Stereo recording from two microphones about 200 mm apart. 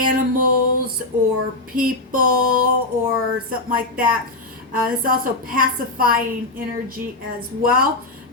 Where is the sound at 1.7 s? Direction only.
45° right (ahead or behind).